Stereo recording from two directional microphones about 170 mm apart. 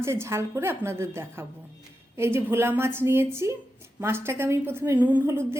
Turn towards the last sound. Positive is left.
turn(degrees=-10)  # may be behind; listen again after turning